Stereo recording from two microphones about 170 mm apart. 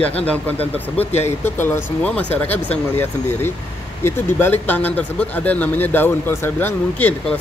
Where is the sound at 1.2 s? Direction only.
10° left (ahead or behind).